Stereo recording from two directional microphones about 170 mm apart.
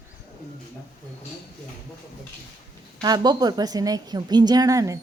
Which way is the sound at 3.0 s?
25° right (ahead or behind).